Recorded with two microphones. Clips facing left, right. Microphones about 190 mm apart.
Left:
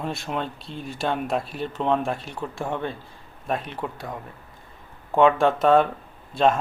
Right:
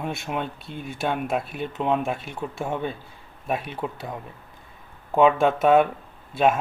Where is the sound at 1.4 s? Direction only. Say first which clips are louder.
Even; 55° right (ahead or behind).